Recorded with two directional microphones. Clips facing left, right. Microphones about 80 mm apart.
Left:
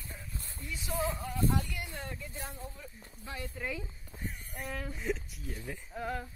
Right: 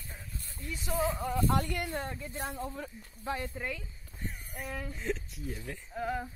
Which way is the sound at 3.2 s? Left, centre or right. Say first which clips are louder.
Right 7 dB; right.